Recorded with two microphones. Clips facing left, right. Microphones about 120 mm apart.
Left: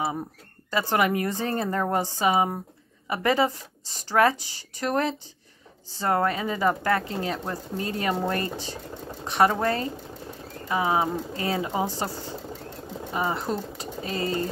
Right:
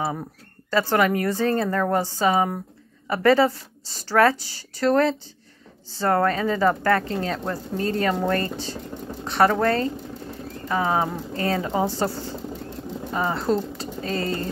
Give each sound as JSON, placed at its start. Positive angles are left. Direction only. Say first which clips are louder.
{"t": 0.7, "sound": "a woman's voice", "louder": "right 3 dB", "side_deg": 15}
{"t": 13.1, "sound": "speech", "louder": "right 4 dB", "side_deg": 15}